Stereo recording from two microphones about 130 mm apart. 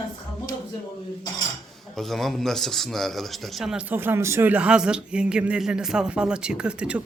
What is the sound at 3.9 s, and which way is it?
Speech, 15° right (ahead or behind).